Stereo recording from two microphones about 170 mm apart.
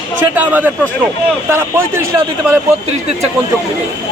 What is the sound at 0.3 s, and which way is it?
Speech, 10° right (ahead or behind).